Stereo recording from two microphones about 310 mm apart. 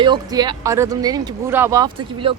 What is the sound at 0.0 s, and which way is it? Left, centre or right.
Speech, centre.